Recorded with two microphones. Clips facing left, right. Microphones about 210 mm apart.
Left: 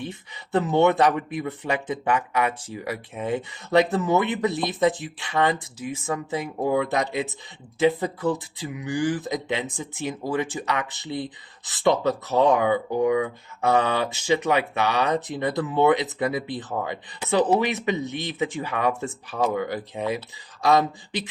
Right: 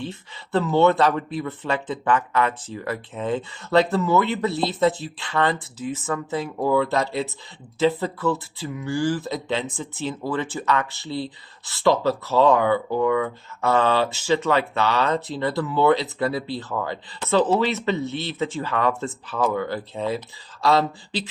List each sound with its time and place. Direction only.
0.0 s speech: 15° left (ahead or behind)